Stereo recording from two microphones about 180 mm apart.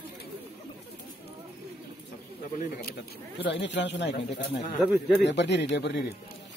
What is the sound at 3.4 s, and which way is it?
Speech, 75° left (ahead or behind).